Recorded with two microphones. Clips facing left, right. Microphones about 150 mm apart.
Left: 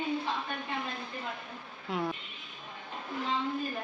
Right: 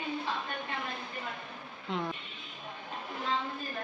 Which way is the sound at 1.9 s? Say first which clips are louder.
Left 1 dB; 5° left (ahead or behind).